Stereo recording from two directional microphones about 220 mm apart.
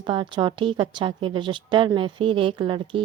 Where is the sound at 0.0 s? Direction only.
20° right (ahead or behind).